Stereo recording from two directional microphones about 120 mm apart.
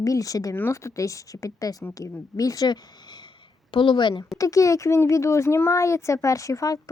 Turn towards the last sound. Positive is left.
turn(degrees=30)  # may be behind; listen again after turning